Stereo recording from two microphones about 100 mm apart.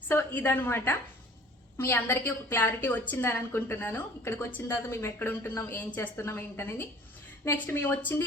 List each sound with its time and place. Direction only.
0.1 s a woman's voice: 20° left (ahead or behind)